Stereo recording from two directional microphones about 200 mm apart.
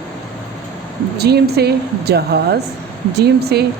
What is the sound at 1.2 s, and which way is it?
Speech, 55° right (ahead or behind).